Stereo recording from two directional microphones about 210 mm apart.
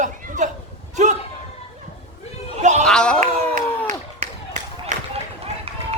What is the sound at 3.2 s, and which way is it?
Speech, 35° right (ahead or behind).